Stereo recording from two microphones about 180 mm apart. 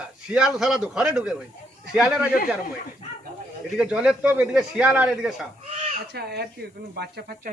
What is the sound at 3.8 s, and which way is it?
A man's voice, 5° right (ahead or behind).